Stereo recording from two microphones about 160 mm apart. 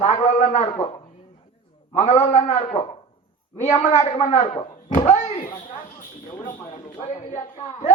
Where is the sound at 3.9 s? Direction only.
45° left (ahead or behind).